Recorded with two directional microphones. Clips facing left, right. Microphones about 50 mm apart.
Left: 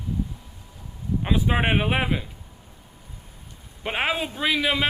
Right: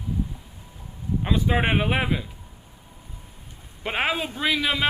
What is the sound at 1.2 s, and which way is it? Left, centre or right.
Speech, centre.